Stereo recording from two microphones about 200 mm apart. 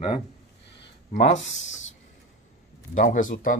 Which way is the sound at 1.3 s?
70° left (ahead or behind).